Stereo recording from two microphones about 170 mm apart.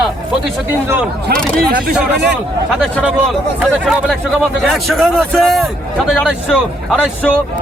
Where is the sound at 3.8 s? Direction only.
Centre (ahead or behind).